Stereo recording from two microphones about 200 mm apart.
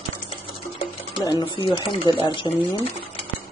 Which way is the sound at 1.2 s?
20° left (ahead or behind).